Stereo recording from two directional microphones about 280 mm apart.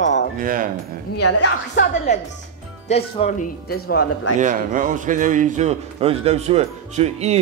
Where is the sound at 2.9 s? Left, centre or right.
Left.